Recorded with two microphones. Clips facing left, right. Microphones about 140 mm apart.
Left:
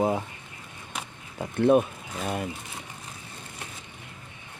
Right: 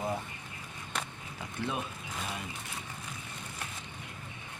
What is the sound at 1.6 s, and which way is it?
Speech, 55° left (ahead or behind).